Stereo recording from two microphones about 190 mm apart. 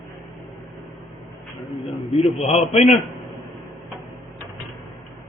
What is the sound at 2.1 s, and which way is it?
Speech, 30° left (ahead or behind).